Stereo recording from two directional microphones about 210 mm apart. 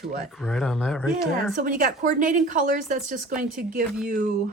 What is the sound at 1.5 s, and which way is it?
Speech, 40° right (ahead or behind).